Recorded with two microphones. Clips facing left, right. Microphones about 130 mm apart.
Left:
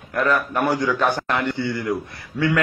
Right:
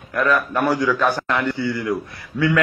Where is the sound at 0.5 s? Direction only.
20° left (ahead or behind).